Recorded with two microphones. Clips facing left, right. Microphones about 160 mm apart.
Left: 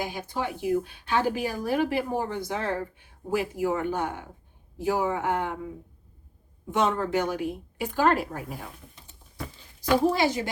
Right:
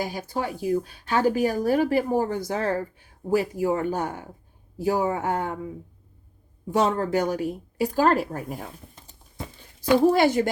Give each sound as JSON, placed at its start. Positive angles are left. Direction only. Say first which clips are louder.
{"t": 0.0, "sound": "speech", "louder": "right 2 dB", "side_deg": -40}
{"t": 6.7, "sound": "speech", "louder": "right 3 dB", "side_deg": -35}